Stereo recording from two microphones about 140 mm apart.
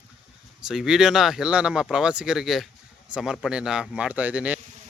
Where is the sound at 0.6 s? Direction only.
5° right (ahead or behind).